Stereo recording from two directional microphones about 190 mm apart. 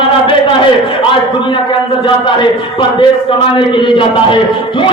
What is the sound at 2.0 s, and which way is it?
A man's voice, 25° left (ahead or behind).